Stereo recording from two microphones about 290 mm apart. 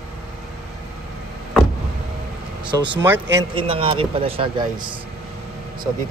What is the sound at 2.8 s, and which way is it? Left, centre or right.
A man's voice, centre.